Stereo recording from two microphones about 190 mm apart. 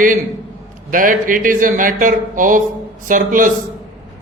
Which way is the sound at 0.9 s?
45° right (ahead or behind).